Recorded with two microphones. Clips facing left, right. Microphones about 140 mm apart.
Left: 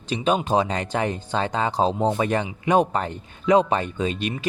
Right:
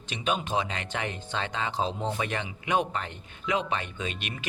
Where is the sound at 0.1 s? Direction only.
35° left (ahead or behind).